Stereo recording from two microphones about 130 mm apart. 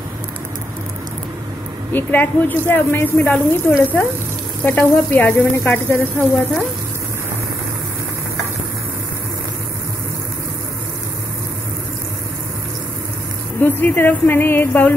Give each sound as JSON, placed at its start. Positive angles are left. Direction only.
{"t": 1.9, "sound": "speech", "side_deg": 15}
{"t": 13.6, "sound": "speech", "side_deg": 15}